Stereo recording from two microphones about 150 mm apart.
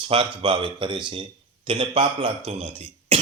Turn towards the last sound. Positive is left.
turn(degrees=-40)  # may be behind; listen again after turning